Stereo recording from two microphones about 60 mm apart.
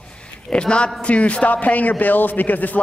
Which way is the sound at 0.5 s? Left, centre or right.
Centre.